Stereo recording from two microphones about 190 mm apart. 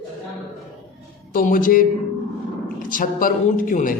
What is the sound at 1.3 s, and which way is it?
A man's voice, 45° left (ahead or behind).